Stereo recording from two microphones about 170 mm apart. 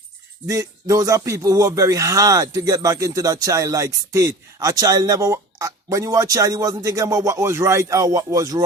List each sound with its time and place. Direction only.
0.4 s speech: 20° right (ahead or behind)